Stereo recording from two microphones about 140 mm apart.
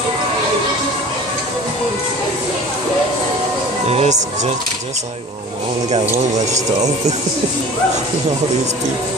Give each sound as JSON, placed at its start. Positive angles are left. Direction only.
{"t": 3.8, "sound": "music", "side_deg": -50}